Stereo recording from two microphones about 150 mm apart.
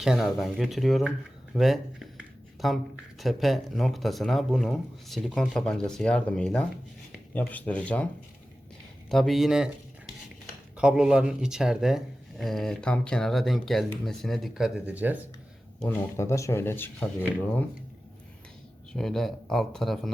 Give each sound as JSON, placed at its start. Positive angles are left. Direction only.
{"t": 0.0, "sound": "speech", "side_deg": -5}
{"t": 9.0, "sound": "speech", "side_deg": 0}
{"t": 10.8, "sound": "speech", "side_deg": -5}
{"t": 15.8, "sound": "speech", "side_deg": 15}
{"t": 18.9, "sound": "speech", "side_deg": 0}